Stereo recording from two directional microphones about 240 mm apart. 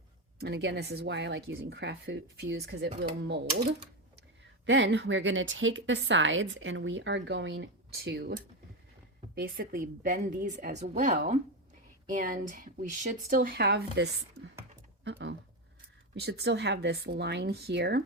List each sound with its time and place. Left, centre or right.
0.3 s a woman's voice: right
4.6 s a woman's voice: right
9.3 s a woman's voice: right